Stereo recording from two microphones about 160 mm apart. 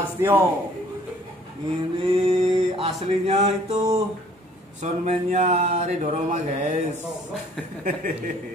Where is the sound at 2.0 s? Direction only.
35° right (ahead or behind).